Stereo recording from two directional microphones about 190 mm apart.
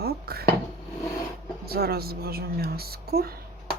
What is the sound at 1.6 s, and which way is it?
A woman's voice, 55° right (ahead or behind).